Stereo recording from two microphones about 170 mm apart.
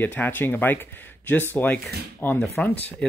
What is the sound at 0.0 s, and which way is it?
Speech, 10° left (ahead or behind).